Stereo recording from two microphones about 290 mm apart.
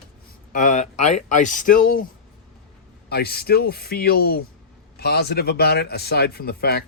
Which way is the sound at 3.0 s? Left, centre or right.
Left.